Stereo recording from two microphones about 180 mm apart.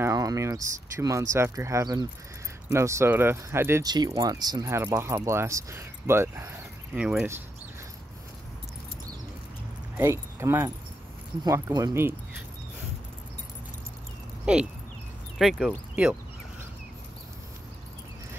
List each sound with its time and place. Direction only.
0.0 s speech: 20° right (ahead or behind)
9.9 s speech: 15° right (ahead or behind)
14.4 s speech: 5° right (ahead or behind)